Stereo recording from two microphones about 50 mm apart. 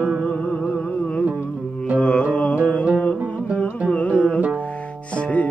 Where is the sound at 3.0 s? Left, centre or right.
Left.